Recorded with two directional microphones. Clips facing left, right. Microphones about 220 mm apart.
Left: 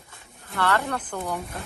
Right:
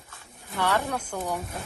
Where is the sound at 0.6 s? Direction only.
15° right (ahead or behind).